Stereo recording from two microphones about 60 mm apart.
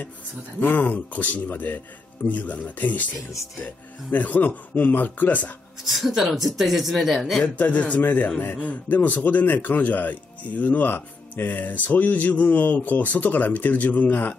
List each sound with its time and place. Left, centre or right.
0.6 s a man's voice: left
4.1 s a man's voice: left
5.9 s speech: centre
7.4 s a man's voice: left